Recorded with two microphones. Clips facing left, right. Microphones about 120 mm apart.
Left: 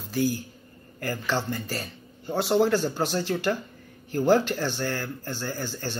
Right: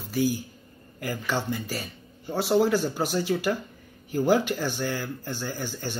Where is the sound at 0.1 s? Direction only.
10° right (ahead or behind).